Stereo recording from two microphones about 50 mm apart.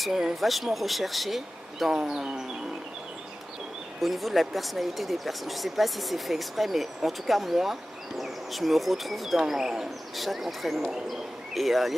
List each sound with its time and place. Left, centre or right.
0.0 s speech: centre
1.9 s speech: centre
4.0 s speech: centre